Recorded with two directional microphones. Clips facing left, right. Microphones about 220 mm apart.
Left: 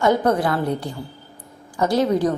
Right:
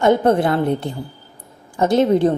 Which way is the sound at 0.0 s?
25° right (ahead or behind).